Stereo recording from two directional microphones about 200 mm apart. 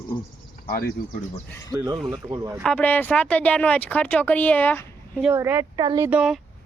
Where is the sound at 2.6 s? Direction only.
5° left (ahead or behind).